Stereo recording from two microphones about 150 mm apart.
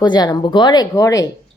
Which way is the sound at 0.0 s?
30° left (ahead or behind).